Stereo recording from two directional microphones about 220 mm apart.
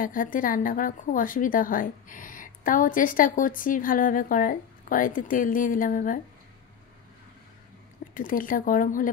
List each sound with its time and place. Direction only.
0.0 s a woman's voice: 40° left (ahead or behind)
8.1 s a woman's voice: 40° left (ahead or behind)